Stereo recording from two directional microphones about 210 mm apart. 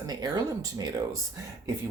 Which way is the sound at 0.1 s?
20° right (ahead or behind).